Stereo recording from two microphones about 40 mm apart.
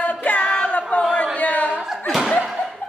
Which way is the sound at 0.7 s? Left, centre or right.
Left.